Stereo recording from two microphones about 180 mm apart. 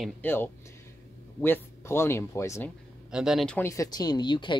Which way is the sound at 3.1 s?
5° right (ahead or behind).